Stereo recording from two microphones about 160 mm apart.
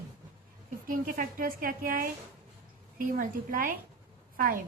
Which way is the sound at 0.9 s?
65° right (ahead or behind).